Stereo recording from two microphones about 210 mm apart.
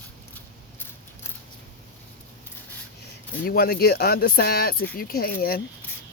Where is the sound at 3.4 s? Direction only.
45° left (ahead or behind).